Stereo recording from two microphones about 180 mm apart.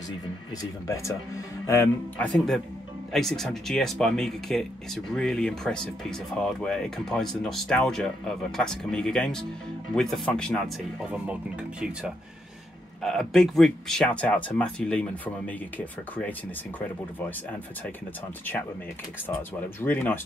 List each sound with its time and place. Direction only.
0.6 s speech: 15° left (ahead or behind)
13.0 s speech: centre (ahead or behind)
19.8 s speech: 10° left (ahead or behind)